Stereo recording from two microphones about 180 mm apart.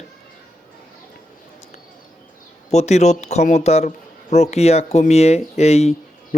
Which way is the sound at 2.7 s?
40° left (ahead or behind).